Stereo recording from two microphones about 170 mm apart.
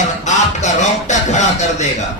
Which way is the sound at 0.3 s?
45° left (ahead or behind).